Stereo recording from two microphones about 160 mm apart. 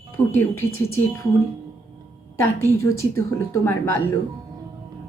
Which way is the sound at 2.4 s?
15° left (ahead or behind).